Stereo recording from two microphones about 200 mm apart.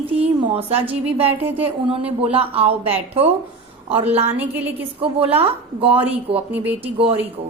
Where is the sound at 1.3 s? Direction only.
10° right (ahead or behind).